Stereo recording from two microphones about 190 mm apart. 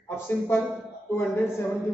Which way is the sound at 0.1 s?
10° left (ahead or behind).